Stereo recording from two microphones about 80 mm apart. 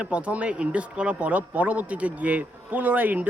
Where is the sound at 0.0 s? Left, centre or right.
Centre.